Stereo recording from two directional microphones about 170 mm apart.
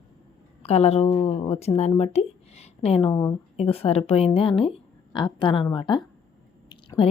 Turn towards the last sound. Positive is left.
turn(degrees=30)  # may be behind; listen again after turning